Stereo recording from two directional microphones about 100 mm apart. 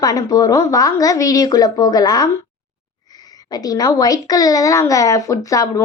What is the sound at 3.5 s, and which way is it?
Speech, 40° left (ahead or behind).